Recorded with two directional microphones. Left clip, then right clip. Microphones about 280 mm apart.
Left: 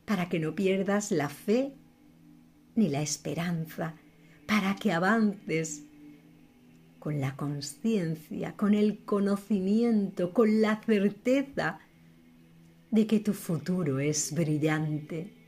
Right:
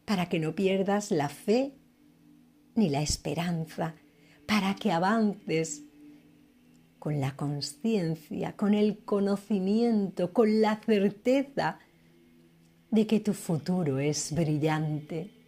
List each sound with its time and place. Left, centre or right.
0.0 s speech: centre
2.7 s speech: centre
7.0 s speech: centre
12.9 s speech: centre